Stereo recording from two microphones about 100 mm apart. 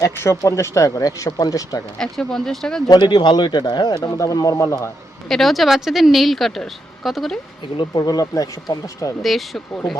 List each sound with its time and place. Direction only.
0.0 s speech: 30° left (ahead or behind)
2.0 s speech: 5° left (ahead or behind)
3.0 s speech: 50° left (ahead or behind); by 4.9 s 30° left (ahead or behind)
5.3 s speech: centre (ahead or behind)
7.8 s speech: 40° left (ahead or behind)
9.2 s speech: centre (ahead or behind)